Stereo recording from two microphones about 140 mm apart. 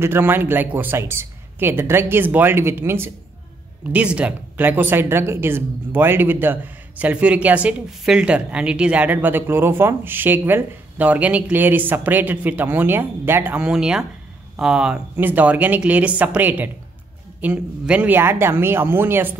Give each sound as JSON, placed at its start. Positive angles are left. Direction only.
{"t": 0.0, "sound": "speech", "side_deg": -15}